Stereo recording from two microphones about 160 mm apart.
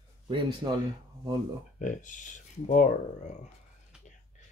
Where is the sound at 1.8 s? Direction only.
50° left (ahead or behind).